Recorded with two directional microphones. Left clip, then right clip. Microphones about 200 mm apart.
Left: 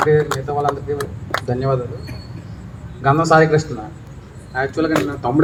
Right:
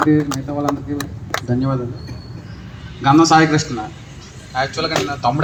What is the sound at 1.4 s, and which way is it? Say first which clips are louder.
Speech: left 3 dB; 55° left (ahead or behind).